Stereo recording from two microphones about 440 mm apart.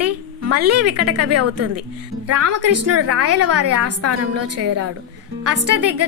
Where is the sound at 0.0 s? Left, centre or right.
Right.